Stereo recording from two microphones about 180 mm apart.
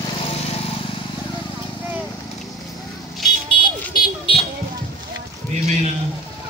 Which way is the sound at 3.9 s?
30° left (ahead or behind).